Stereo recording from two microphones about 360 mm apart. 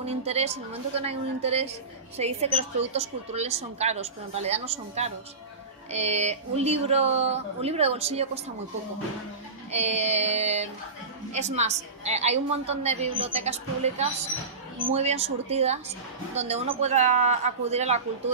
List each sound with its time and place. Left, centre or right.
0.0 s a woman's voice: centre
9.7 s a woman's voice: centre